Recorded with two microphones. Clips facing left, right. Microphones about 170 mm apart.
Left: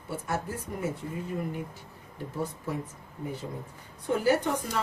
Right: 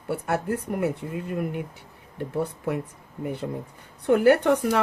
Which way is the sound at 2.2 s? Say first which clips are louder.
Right 7 dB; 60° right (ahead or behind).